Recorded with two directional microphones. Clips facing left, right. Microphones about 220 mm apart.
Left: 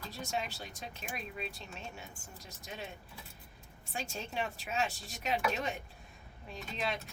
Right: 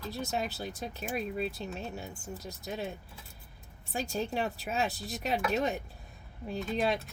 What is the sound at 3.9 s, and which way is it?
Speech, 40° right (ahead or behind).